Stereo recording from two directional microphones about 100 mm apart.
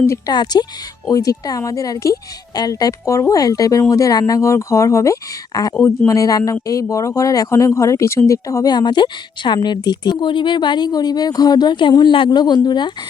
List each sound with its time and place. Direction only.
0.3 s speech: 45° left (ahead or behind)